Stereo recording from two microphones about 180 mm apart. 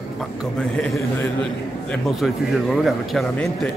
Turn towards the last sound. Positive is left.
turn(degrees=0)  # may be behind; listen again after turning